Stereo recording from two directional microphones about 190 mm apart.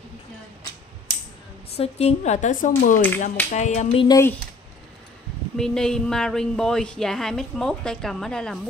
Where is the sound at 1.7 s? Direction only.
35° left (ahead or behind).